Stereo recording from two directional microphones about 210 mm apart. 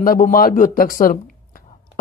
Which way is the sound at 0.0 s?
40° left (ahead or behind).